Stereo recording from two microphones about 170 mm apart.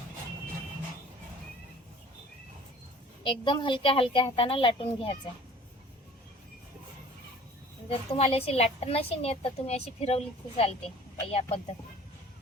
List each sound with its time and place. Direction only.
3.2 s a woman's voice: 30° left (ahead or behind)
7.9 s a woman's voice: 35° left (ahead or behind)